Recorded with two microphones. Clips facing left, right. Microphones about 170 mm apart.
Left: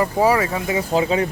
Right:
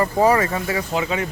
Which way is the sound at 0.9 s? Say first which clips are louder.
Left 6 dB; 30° left (ahead or behind).